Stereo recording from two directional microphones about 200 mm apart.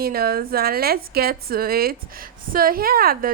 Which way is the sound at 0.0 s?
50° right (ahead or behind).